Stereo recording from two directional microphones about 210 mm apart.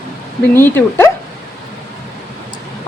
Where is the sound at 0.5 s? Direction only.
10° left (ahead or behind).